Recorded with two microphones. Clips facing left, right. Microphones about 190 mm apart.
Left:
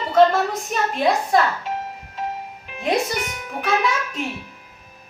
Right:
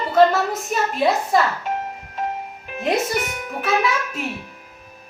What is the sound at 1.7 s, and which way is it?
Music, 50° right (ahead or behind).